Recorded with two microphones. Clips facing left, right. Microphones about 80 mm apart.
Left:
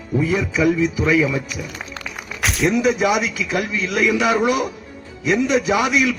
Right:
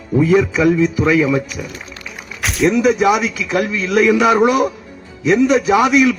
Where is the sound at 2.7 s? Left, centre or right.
Right.